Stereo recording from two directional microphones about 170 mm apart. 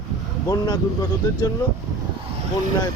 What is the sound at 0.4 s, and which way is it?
Speech, 20° left (ahead or behind).